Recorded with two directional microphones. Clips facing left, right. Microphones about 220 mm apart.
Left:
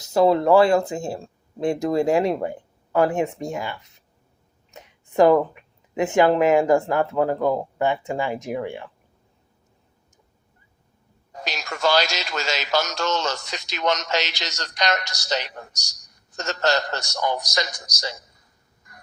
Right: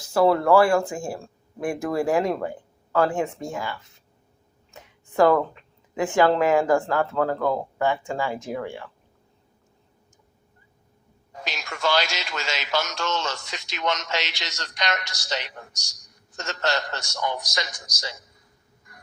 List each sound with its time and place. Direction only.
0.0 s speech: 20° left (ahead or behind)
11.3 s speech: 40° left (ahead or behind)